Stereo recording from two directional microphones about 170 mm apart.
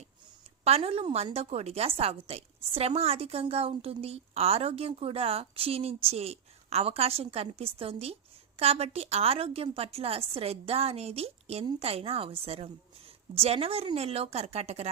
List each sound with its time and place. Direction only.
0.6 s a woman's voice: 35° right (ahead or behind)